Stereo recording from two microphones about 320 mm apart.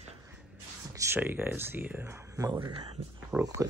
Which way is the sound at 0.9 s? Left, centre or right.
Centre.